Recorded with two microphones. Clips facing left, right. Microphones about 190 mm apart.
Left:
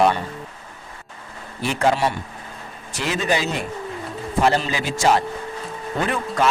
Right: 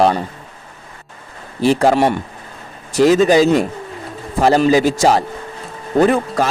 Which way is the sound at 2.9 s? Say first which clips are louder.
Right 12 dB; 40° right (ahead or behind).